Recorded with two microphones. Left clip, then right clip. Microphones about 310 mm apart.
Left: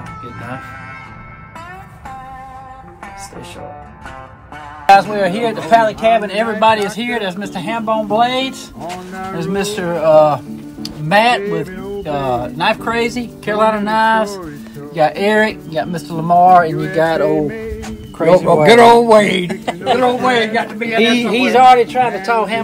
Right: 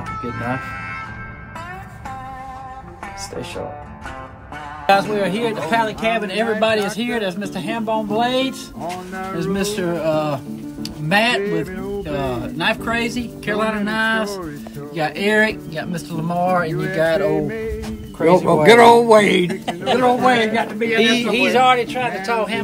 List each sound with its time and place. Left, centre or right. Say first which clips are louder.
4.8 s speech: left 6 dB; centre; by 8.5 s left
8.8 s speech: left 2 dB; centre
9.4 s speech: left 3 dB; centre
11.4 s speech: left 2 dB; centre
12.0 s speech: left 7 dB; centre
17.5 s music: left 1 dB; centre
18.2 s a man's voice: left 3 dB; centre
19.6 s a sound: left 4 dB; centre
20.0 s a man's voice: even; centre
21.0 s speech: left 4 dB; centre